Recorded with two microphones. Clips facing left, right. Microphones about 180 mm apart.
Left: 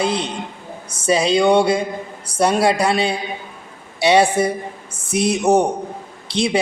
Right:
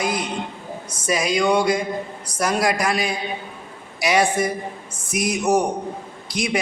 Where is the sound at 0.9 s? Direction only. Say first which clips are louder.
Left 5 dB; 30° left (ahead or behind).